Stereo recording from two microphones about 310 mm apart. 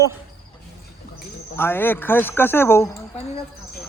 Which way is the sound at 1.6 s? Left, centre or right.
Centre.